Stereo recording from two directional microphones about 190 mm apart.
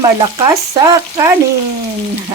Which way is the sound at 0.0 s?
20° right (ahead or behind).